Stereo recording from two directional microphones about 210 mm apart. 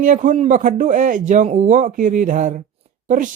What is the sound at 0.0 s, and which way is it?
A man's voice, 35° right (ahead or behind).